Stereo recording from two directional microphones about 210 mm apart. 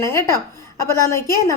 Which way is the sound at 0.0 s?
10° left (ahead or behind).